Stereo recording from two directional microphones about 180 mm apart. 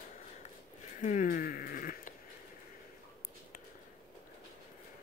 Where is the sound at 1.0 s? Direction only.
45° left (ahead or behind).